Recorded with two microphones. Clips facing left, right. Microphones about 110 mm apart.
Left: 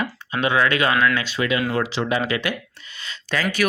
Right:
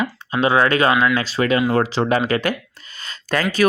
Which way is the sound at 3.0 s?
45° right (ahead or behind).